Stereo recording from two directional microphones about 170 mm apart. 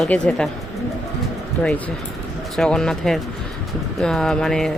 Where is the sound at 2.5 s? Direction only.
5° left (ahead or behind).